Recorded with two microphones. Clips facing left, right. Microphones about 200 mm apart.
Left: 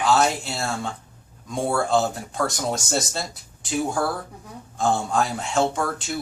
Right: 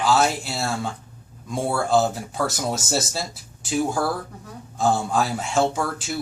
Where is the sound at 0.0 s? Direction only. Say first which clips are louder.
Even; centre (ahead or behind).